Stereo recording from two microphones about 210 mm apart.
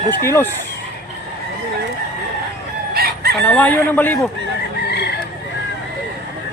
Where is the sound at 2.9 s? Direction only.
50° right (ahead or behind).